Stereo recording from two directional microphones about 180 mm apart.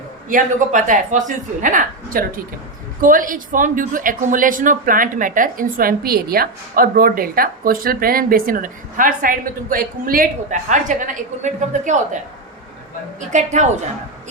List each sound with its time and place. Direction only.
0.3 s speech: 45° right (ahead or behind)
13.1 s a woman's voice: 40° right (ahead or behind)